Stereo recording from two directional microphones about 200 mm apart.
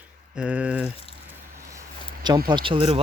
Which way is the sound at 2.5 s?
25° right (ahead or behind).